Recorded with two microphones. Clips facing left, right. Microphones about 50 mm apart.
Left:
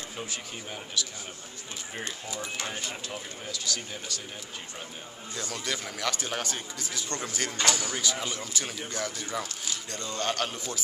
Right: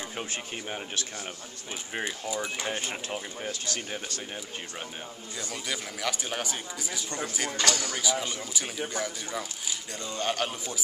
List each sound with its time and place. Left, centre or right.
0.2 s speech: right
2.0 s speech: centre
2.7 s speech: right
5.3 s speech: centre
7.5 s speech: left
8.0 s speech: centre